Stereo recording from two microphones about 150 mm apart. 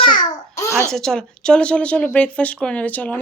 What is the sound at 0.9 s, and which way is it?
Speech, 5° left (ahead or behind).